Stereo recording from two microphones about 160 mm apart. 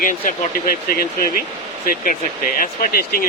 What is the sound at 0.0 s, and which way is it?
Speech, 60° left (ahead or behind).